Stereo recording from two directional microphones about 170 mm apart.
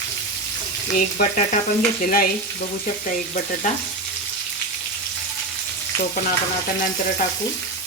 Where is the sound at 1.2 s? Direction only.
50° left (ahead or behind).